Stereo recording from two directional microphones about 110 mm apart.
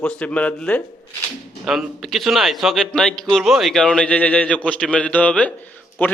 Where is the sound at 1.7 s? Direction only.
Centre (ahead or behind).